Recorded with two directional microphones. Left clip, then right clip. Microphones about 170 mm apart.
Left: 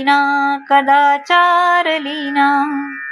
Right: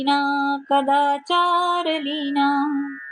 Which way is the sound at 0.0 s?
10° left (ahead or behind).